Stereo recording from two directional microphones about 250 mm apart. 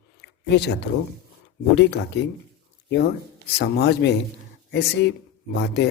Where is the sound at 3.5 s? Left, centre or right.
Left.